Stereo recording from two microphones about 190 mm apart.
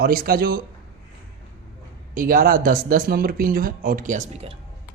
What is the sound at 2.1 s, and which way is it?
Speech, 45° right (ahead or behind).